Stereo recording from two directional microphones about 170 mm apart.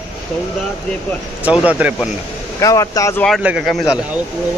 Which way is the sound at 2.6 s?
20° left (ahead or behind).